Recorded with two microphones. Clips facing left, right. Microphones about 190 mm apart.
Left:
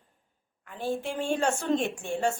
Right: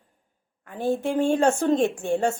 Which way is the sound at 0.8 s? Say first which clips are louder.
Right 8 dB; 45° right (ahead or behind).